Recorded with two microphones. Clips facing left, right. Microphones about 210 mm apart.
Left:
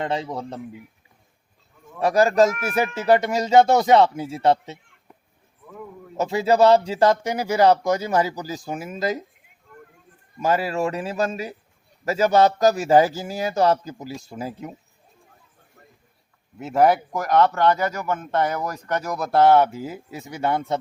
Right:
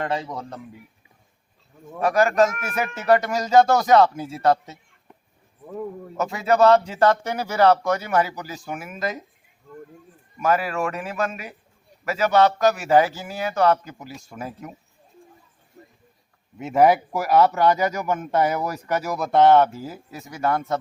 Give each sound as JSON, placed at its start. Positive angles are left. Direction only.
{"t": 0.0, "sound": "speech", "side_deg": 25}
{"t": 2.0, "sound": "speech", "side_deg": 35}
{"t": 6.1, "sound": "a man's voice", "side_deg": 30}
{"t": 7.0, "sound": "speech", "side_deg": 15}
{"t": 8.0, "sound": "a man's voice", "side_deg": 35}
{"t": 10.4, "sound": "a man's voice", "side_deg": 30}
{"t": 16.6, "sound": "speech", "side_deg": 0}